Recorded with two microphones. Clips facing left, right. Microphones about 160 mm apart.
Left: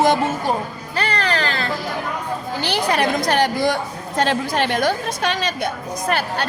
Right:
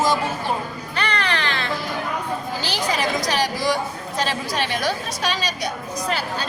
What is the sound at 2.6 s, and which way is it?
A woman's voice, 60° left (ahead or behind).